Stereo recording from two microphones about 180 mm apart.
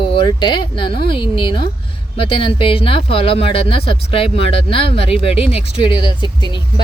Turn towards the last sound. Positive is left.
turn(degrees=25)  # may be behind; listen again after turning